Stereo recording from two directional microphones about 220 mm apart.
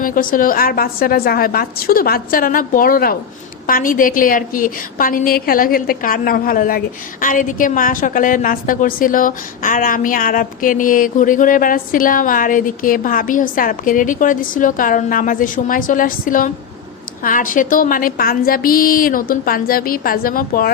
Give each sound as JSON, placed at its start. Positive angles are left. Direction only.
{"t": 0.0, "sound": "a woman's voice", "side_deg": 40}